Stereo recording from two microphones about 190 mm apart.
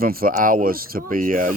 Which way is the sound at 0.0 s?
50° right (ahead or behind).